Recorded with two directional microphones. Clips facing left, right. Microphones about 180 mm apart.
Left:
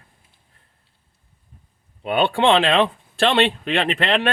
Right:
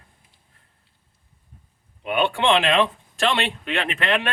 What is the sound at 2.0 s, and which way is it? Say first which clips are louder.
Speech: left 3 dB; 35° left (ahead or behind).